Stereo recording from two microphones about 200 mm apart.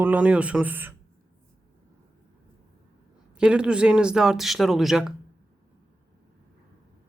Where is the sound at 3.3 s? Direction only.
5° right (ahead or behind).